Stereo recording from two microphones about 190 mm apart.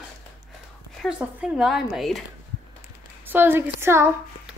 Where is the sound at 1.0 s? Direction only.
5° right (ahead or behind).